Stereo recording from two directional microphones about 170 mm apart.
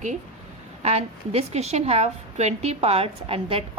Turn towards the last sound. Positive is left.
turn(degrees=-35)  # may be behind; listen again after turning